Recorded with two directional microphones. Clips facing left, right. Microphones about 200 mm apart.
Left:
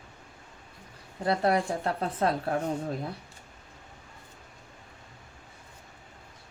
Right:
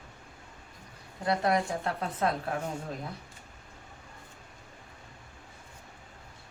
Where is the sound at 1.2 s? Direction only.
30° left (ahead or behind).